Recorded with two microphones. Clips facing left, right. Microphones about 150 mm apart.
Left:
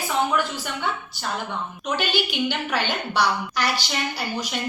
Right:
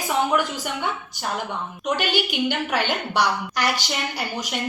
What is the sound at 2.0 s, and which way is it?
A woman's voice, 15° right (ahead or behind).